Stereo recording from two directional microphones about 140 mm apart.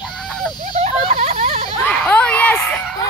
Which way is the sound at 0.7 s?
50° right (ahead or behind).